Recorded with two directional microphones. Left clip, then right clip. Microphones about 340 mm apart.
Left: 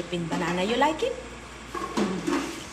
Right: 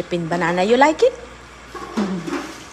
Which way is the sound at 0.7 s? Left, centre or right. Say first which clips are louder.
Right 11 dB; centre.